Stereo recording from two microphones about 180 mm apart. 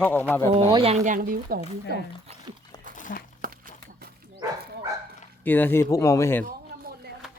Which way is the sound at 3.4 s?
50° right (ahead or behind).